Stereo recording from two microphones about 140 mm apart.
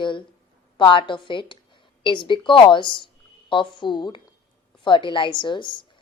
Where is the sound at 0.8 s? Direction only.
35° left (ahead or behind).